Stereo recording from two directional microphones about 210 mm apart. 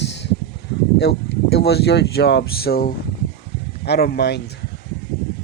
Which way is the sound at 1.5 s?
50° left (ahead or behind).